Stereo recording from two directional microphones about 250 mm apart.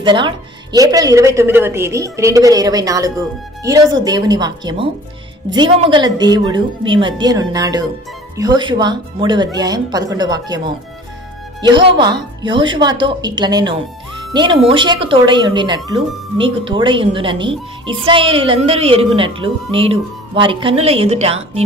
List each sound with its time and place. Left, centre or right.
0.0 s a woman's voice: centre
11.6 s a woman's voice: centre